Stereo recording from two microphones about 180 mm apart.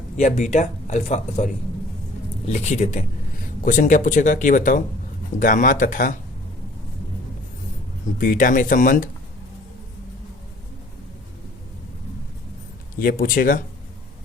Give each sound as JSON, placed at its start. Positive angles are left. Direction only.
{"t": 0.2, "sound": "speech", "side_deg": 40}
{"t": 2.5, "sound": "speech", "side_deg": 40}
{"t": 8.2, "sound": "speech", "side_deg": 50}
{"t": 13.0, "sound": "speech", "side_deg": 50}